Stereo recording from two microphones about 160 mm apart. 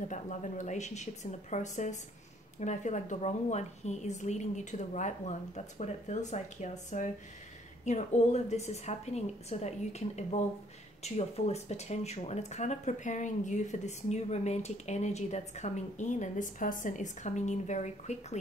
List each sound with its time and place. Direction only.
0.1 s speech: 50° left (ahead or behind)